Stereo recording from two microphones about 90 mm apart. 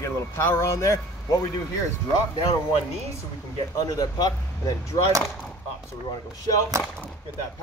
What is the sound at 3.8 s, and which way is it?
Speech, 40° left (ahead or behind).